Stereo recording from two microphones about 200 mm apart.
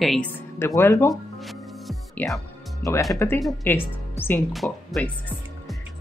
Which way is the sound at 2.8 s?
15° left (ahead or behind).